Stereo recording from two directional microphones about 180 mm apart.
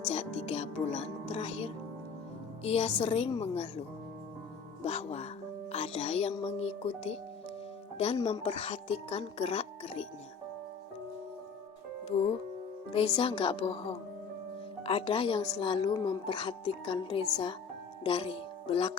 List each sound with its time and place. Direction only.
0.1 s speech: 35° left (ahead or behind)
12.9 s a woman's voice: 30° left (ahead or behind)